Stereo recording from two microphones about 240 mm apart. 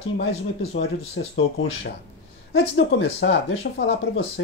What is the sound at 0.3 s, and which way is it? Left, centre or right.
Speech, left.